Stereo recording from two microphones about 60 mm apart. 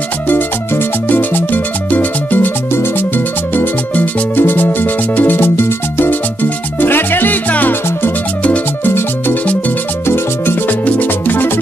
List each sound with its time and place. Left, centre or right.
0.3 s music: left
2.7 s music: left
3.5 s music: left